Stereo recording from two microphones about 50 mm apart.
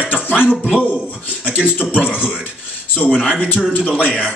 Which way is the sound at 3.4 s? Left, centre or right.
Left.